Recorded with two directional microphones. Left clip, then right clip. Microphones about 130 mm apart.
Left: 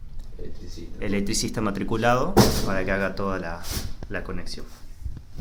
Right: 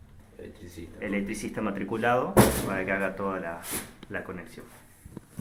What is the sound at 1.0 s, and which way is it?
Speech, 45° left (ahead or behind).